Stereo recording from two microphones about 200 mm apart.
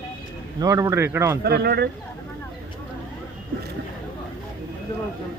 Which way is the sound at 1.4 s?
55° right (ahead or behind).